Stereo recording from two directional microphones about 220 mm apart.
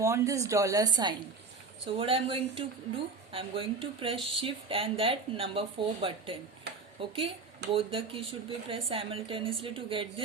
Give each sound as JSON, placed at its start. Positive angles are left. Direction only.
{"t": 0.0, "sound": "speech", "side_deg": -15}